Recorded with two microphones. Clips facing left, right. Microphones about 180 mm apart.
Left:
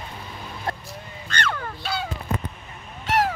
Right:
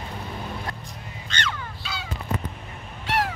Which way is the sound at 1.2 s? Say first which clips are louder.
Left 4 dB; 55° left (ahead or behind).